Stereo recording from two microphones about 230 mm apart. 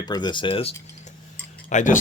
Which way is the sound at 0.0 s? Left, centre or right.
Centre.